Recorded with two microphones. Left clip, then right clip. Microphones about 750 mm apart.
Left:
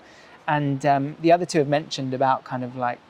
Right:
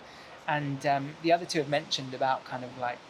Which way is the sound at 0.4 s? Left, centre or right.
Left.